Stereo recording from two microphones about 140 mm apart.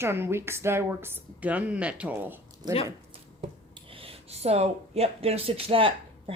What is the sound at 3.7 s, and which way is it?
Speech, 40° right (ahead or behind).